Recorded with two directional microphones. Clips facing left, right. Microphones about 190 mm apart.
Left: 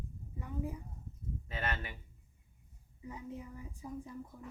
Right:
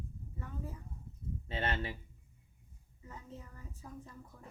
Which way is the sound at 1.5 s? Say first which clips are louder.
Right 3 dB; 30° right (ahead or behind).